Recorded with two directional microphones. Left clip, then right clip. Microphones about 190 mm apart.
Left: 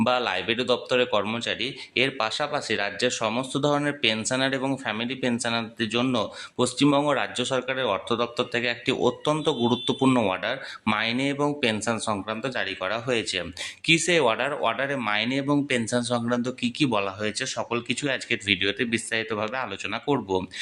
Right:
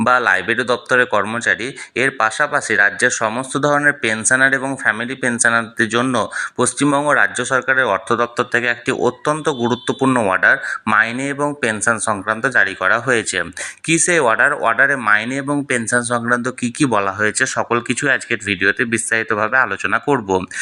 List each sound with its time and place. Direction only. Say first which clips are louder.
0.0 s speech: right 10 dB; 15° right (ahead or behind)
18.0 s speech: right 9 dB; 10° right (ahead or behind)